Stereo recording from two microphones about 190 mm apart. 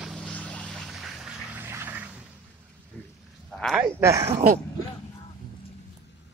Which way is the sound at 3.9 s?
15° right (ahead or behind).